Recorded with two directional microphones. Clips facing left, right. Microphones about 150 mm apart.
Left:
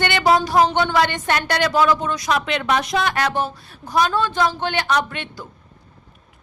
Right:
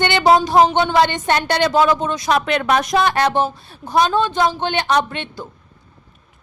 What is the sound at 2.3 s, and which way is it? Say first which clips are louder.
Speech: right 4 dB; 45° right (ahead or behind).